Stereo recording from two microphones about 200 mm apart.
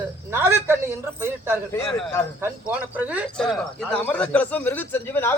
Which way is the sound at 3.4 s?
5° left (ahead or behind).